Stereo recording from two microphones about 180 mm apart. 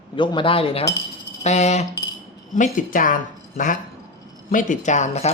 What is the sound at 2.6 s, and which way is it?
Speech, 50° left (ahead or behind).